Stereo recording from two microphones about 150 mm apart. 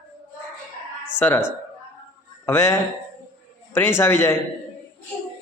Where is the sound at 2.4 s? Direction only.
15° left (ahead or behind).